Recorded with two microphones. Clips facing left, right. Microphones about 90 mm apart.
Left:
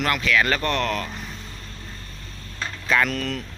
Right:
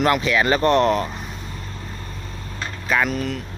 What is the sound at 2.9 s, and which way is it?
Speech, 5° right (ahead or behind).